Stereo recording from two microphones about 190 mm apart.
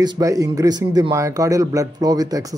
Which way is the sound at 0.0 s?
20° right (ahead or behind).